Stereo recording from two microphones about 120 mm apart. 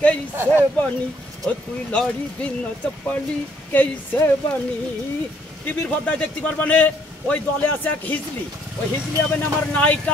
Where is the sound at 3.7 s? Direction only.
15° left (ahead or behind).